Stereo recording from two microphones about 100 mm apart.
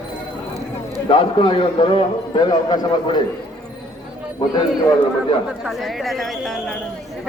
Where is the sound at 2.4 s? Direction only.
45° left (ahead or behind).